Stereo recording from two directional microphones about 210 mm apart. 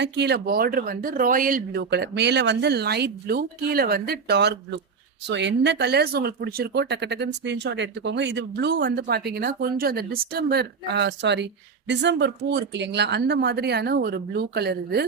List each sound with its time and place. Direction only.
0.0 s speech: 50° right (ahead or behind)